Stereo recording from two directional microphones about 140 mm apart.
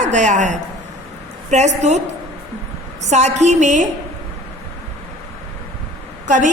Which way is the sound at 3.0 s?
55° right (ahead or behind).